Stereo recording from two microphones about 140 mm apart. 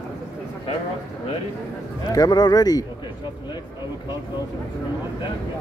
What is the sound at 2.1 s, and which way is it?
Speech, 30° left (ahead or behind).